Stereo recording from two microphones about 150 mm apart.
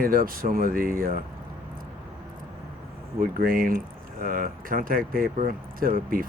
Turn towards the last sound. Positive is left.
turn(degrees=-70)  # may be behind; listen again after turning